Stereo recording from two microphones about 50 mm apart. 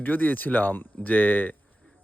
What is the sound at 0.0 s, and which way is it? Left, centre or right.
Speech, left.